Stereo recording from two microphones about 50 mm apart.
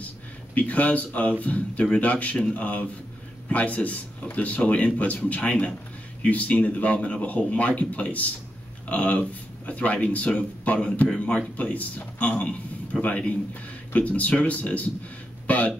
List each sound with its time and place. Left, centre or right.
0.6 s a man's voice: left